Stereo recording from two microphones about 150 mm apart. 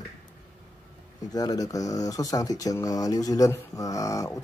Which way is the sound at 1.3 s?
25° left (ahead or behind).